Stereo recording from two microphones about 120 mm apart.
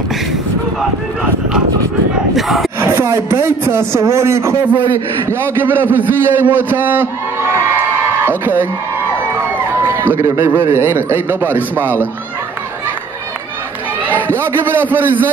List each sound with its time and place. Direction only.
2.3 s battle cry: centre (ahead or behind)
2.8 s a sound: 20° right (ahead or behind)
3.3 s a man's voice: 20° right (ahead or behind)
8.3 s a man's voice: 15° right (ahead or behind)
9.8 s a man's voice: 20° right (ahead or behind)
14.3 s a man's voice: 20° right (ahead or behind)